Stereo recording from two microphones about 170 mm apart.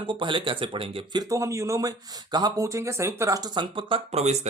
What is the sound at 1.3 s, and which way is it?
Speech, 20° right (ahead or behind).